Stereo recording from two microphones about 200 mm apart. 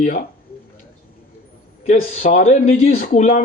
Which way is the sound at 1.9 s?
35° left (ahead or behind).